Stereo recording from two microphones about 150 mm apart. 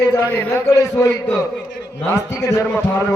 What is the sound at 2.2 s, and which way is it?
Speech, 20° left (ahead or behind).